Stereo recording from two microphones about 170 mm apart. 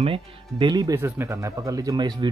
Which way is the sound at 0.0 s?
30° right (ahead or behind).